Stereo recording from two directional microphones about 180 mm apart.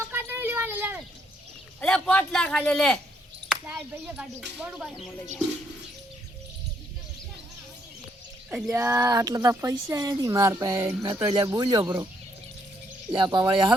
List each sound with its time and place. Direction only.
0.0 s a sound: 10° right (ahead or behind)
1.8 s speech: 5° left (ahead or behind)
3.5 s speech: 5° right (ahead or behind)
8.4 s speech: 5° right (ahead or behind)
13.1 s speech: 25° right (ahead or behind)